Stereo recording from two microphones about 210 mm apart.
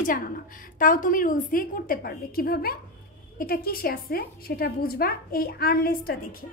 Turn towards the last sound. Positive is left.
turn(degrees=45)  # may be behind; listen again after turning